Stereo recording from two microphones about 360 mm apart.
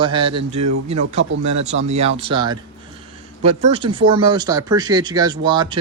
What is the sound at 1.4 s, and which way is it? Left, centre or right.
Speech, centre.